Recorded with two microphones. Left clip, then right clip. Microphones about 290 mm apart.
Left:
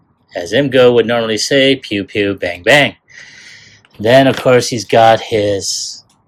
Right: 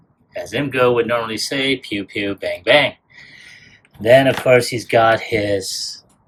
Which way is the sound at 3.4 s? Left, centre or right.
Left.